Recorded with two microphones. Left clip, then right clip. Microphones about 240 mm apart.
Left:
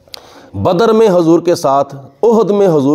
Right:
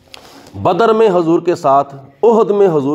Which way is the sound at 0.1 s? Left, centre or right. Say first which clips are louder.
Left 4 dB; left.